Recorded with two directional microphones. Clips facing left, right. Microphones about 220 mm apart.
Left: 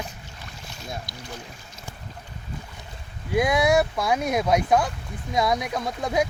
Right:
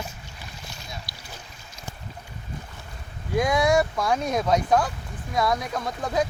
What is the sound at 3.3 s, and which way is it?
Speech, 10° left (ahead or behind).